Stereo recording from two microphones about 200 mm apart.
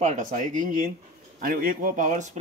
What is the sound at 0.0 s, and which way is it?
Speech, 40° right (ahead or behind).